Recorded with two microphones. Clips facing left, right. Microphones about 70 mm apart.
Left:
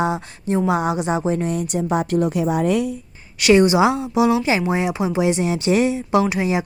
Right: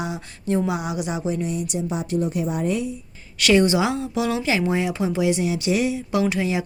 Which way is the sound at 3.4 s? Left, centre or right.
Centre.